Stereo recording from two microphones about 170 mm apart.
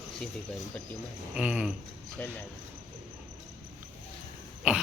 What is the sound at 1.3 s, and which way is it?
Speech, 5° right (ahead or behind).